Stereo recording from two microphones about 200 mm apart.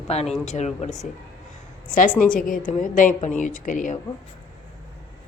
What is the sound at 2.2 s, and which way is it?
A woman's voice, 45° left (ahead or behind).